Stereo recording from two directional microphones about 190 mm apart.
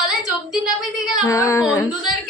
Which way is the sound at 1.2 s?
15° left (ahead or behind).